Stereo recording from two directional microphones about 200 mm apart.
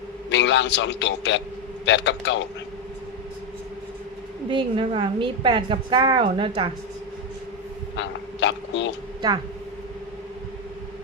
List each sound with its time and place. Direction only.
0.3 s a man's voice: 65° left (ahead or behind)
4.4 s a woman's voice: 25° right (ahead or behind)
7.9 s speech: 65° left (ahead or behind)